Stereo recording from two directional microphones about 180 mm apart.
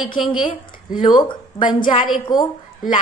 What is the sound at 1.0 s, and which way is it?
Speech, 25° left (ahead or behind).